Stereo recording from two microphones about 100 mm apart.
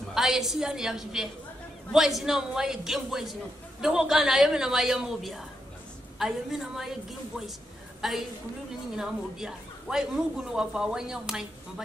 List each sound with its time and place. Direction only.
0.1 s speech: 5° right (ahead or behind)